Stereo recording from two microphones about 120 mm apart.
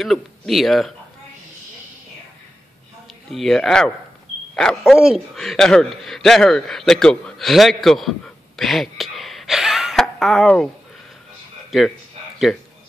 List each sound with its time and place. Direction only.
0.0 s speech: centre (ahead or behind)
3.3 s speech: 5° left (ahead or behind)
8.5 s a sound: centre (ahead or behind)
11.7 s speech: 5° right (ahead or behind)